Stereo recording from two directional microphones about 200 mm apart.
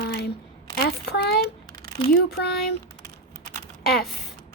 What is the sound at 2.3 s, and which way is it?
Speech, 55° left (ahead or behind).